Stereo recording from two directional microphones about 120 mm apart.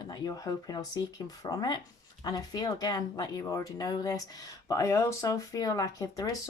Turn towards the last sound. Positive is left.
turn(degrees=30)  # may be behind; listen again after turning